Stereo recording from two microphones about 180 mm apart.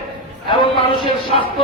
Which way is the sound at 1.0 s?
30° left (ahead or behind).